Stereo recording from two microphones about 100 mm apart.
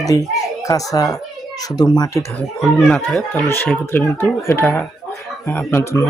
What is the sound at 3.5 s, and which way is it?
Speech, 20° left (ahead or behind).